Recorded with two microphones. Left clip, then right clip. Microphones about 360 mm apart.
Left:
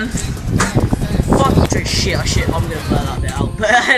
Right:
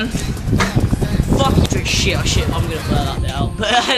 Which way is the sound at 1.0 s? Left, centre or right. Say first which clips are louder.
Even; centre.